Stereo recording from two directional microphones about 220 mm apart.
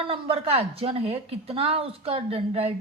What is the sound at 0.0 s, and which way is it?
A woman's voice, 25° right (ahead or behind).